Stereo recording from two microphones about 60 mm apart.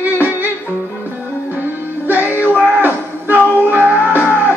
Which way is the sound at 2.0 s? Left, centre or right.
Right.